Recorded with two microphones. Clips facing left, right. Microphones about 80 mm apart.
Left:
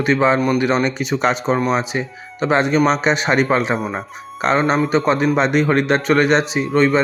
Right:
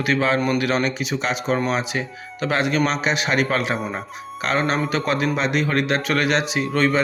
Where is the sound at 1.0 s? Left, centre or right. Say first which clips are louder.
Left 6 dB; left.